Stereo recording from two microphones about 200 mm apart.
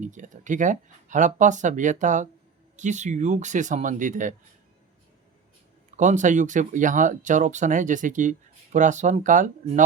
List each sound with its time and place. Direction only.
0.0 s speech: 40° right (ahead or behind)
6.0 s speech: 35° right (ahead or behind)